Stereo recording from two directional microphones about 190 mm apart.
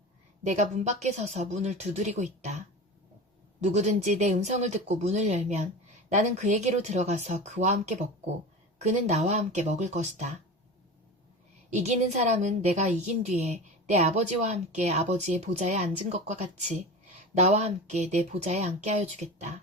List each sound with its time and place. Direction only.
0.4 s a woman's voice: 40° right (ahead or behind)
11.7 s a woman's voice: 35° right (ahead or behind)